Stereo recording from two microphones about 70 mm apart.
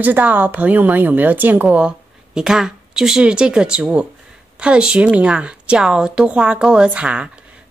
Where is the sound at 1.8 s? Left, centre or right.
Centre.